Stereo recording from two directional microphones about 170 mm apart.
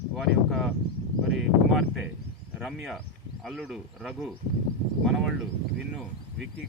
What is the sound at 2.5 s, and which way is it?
Speech, centre (ahead or behind).